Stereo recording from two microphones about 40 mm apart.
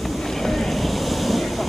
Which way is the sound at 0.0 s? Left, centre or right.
Centre.